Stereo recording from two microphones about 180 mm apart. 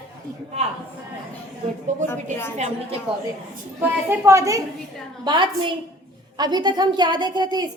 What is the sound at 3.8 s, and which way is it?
A woman's voice, 10° right (ahead or behind).